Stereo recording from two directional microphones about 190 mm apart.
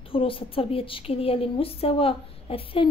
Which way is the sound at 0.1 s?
30° left (ahead or behind).